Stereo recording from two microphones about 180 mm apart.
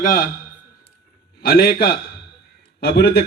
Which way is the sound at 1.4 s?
60° left (ahead or behind).